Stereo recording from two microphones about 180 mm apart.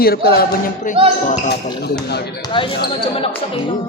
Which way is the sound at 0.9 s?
45° left (ahead or behind).